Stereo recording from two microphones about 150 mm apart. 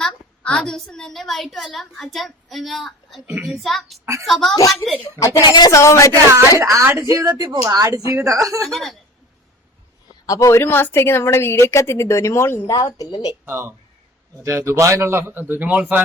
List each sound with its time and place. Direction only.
0.0 s a woman's voice: 5° left (ahead or behind)
4.5 s speech: 20° left (ahead or behind)
6.6 s a woman's voice: 20° right (ahead or behind)
8.6 s a child's voice: centre (ahead or behind)
10.2 s a woman's voice: 20° left (ahead or behind)
13.0 s speech: 30° left (ahead or behind)
13.4 s a man's voice: 15° right (ahead or behind)